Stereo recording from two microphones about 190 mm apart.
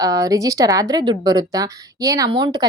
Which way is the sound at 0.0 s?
20° right (ahead or behind).